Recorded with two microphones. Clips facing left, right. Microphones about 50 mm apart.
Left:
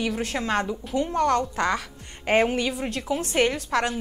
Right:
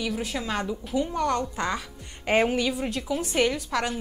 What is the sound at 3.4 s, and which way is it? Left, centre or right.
Speech, left.